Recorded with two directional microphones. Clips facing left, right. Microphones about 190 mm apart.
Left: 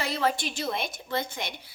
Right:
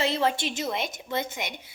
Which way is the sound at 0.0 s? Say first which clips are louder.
Right 2 dB; 25° right (ahead or behind).